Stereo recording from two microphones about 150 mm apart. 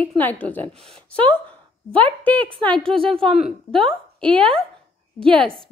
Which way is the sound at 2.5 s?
35° right (ahead or behind).